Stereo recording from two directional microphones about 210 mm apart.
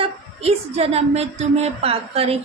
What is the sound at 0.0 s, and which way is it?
A woman's voice, 30° right (ahead or behind).